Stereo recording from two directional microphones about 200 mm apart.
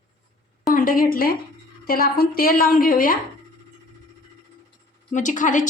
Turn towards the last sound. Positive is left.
turn(degrees=40)  # may be behind; listen again after turning